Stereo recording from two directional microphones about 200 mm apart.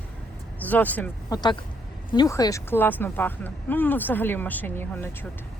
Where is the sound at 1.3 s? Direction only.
20° left (ahead or behind).